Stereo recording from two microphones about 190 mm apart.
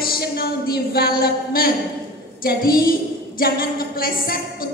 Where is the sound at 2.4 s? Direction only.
50° left (ahead or behind).